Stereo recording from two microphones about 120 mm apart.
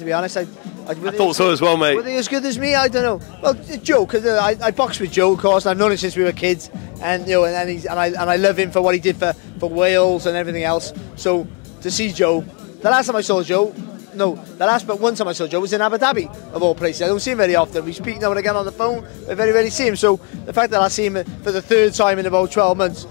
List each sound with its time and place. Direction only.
0.0 s speech: 25° left (ahead or behind)